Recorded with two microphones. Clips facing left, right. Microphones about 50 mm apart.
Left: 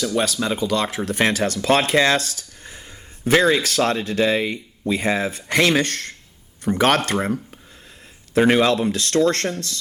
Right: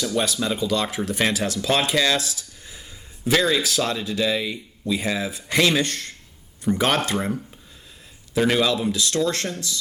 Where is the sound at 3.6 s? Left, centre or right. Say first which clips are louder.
Left 4 dB; left.